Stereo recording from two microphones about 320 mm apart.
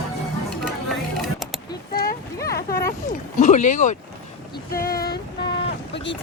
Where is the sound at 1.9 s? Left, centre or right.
Left.